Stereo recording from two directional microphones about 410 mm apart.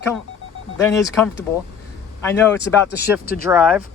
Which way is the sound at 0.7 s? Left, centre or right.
Centre.